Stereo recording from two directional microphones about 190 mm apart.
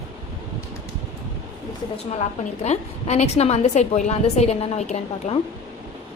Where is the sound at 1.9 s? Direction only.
35° left (ahead or behind).